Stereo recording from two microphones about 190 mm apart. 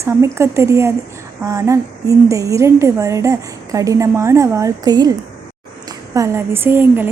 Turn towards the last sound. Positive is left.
turn(degrees=-10)  # may be behind; listen again after turning